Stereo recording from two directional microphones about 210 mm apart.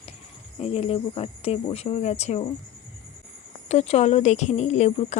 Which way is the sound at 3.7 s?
30° left (ahead or behind).